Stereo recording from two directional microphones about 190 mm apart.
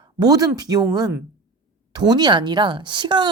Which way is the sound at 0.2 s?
20° right (ahead or behind).